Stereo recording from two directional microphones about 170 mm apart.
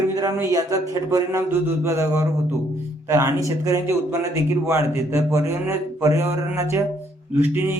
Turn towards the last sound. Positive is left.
turn(degrees=-10)  # may be behind; listen again after turning